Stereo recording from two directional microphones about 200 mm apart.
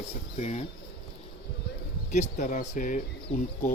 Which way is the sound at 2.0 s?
35° left (ahead or behind).